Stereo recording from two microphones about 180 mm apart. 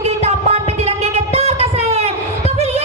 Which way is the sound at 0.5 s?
35° right (ahead or behind).